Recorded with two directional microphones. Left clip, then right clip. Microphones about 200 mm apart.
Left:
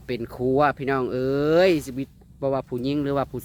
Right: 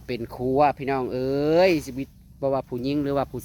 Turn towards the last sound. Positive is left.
turn(degrees=5)  # may be behind; listen again after turning